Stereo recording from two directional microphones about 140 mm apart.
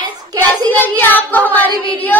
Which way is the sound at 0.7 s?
15° left (ahead or behind).